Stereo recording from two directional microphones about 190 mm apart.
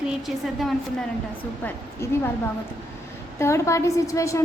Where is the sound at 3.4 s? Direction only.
15° left (ahead or behind).